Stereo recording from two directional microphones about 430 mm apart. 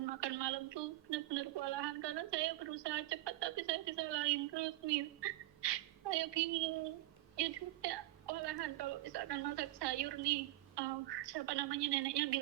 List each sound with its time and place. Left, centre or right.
0.0 s a woman's voice: right